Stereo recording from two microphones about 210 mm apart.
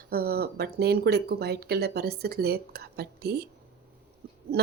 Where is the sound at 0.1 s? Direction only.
45° right (ahead or behind).